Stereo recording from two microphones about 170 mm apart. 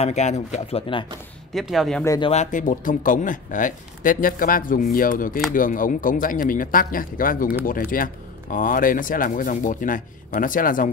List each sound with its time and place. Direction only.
0.0 s speech: 40° left (ahead or behind)
1.5 s speech: centre (ahead or behind)
2.0 s speech: 25° left (ahead or behind)
2.3 s speech: 45° left (ahead or behind)